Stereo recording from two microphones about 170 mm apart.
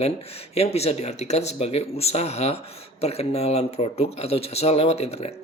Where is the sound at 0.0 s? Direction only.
35° left (ahead or behind).